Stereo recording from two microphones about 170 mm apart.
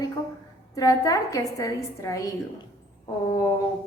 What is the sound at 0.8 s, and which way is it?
A woman's voice, 20° left (ahead or behind).